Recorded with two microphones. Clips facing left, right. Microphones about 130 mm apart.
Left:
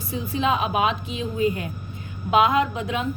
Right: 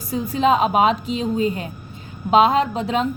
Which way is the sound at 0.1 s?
40° right (ahead or behind).